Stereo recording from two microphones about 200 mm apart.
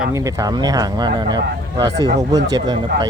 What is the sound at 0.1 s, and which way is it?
Speech, 15° right (ahead or behind).